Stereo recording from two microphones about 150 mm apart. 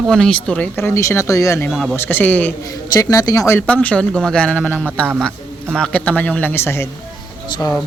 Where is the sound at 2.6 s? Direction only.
20° left (ahead or behind).